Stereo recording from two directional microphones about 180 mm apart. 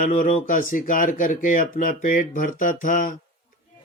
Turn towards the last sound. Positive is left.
turn(degrees=45)  # may be behind; listen again after turning